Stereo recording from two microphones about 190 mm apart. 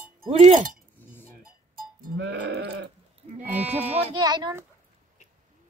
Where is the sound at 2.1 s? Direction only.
70° right (ahead or behind).